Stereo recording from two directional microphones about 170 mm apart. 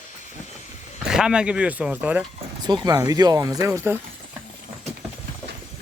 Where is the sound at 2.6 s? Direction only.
25° right (ahead or behind).